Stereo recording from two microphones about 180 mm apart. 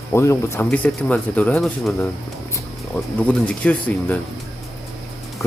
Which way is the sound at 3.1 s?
5° left (ahead or behind).